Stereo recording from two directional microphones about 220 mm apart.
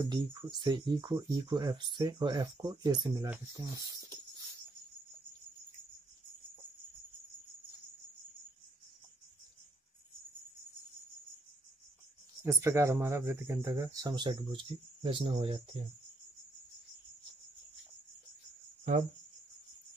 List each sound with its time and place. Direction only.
0.0 s speech: 20° right (ahead or behind)
12.4 s speech: 10° right (ahead or behind)